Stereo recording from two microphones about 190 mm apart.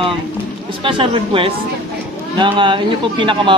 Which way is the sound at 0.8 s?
25° right (ahead or behind).